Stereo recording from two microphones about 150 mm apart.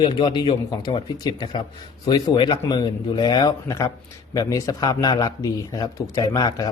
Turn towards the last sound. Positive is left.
turn(degrees=25)  # may be behind; listen again after turning